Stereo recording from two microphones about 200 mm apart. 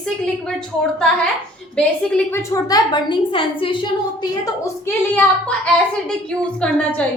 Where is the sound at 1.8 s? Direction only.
10° left (ahead or behind); by 3.7 s 25° left (ahead or behind).